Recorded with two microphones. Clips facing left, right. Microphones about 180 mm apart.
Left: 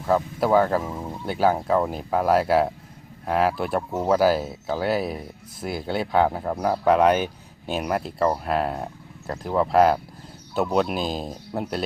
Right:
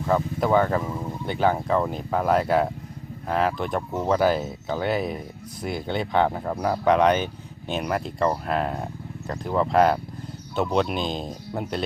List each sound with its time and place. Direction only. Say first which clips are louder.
0.1 s speech: left 1 dB; 5° left (ahead or behind)